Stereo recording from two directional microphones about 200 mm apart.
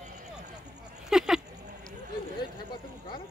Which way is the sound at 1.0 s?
Centre (ahead or behind).